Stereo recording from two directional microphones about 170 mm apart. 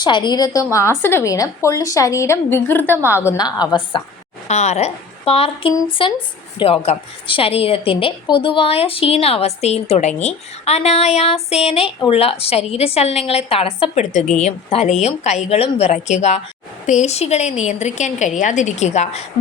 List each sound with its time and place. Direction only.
0.0 s a woman's voice: 25° left (ahead or behind)
2.9 s a woman's voice: 15° right (ahead or behind)
3.2 s a woman's voice: 20° left (ahead or behind)
4.4 s a woman's voice: 40° left (ahead or behind)